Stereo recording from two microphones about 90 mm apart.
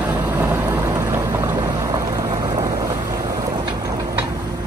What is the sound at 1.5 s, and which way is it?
Boat, 50° right (ahead or behind).